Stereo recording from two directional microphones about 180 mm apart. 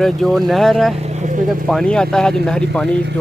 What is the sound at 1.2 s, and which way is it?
Speech, 45° right (ahead or behind).